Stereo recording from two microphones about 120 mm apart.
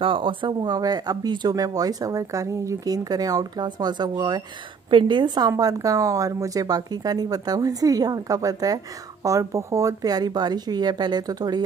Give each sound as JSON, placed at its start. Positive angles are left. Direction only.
{"t": 0.0, "sound": "speech", "side_deg": -45}